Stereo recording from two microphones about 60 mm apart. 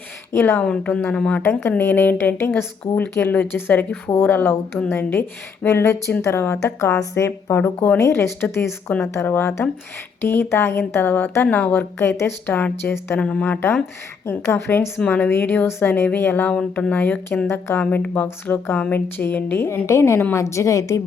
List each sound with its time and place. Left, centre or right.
0.3 s speech: left
0.6 s speech: centre
1.4 s speech: left
11.1 s speech: left
11.9 s speech: left
13.1 s speech: left
14.5 s speech: left
15.0 s speech: left
17.8 s a woman's voice: left